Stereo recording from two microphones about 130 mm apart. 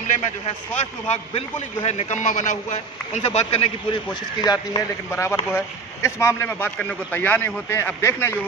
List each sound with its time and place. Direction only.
0.7 s a man's voice: 60° left (ahead or behind)
4.1 s speech: 30° left (ahead or behind)